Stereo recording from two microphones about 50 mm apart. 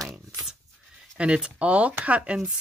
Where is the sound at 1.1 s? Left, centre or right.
Right.